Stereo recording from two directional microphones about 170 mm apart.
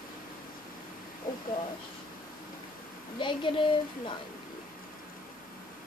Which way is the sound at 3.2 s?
30° left (ahead or behind).